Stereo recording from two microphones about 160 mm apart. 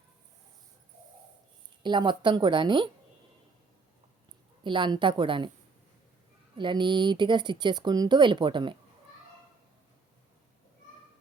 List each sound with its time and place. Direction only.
1.8 s speech: 30° right (ahead or behind)
4.6 s a woman's voice: 30° right (ahead or behind)
6.6 s speech: 30° right (ahead or behind)